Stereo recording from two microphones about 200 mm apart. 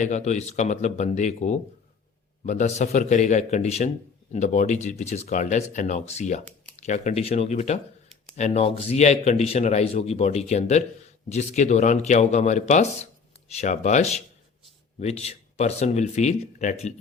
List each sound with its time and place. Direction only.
0.0 s a man's voice: 35° left (ahead or behind)